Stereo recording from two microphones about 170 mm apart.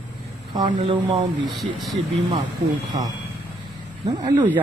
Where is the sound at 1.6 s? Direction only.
Centre (ahead or behind).